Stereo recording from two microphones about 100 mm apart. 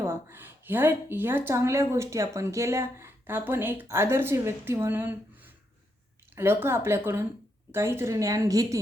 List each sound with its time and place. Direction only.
0.0 s speech: 25° right (ahead or behind)